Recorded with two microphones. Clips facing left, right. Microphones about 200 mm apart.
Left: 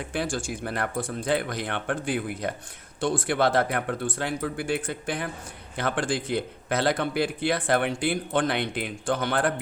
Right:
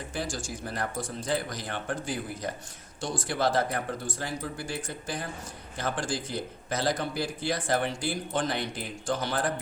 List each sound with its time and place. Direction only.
0.1 s speech: 60° left (ahead or behind)